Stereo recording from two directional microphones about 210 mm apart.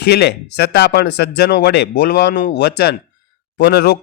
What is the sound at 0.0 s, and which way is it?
A man's voice, 50° left (ahead or behind).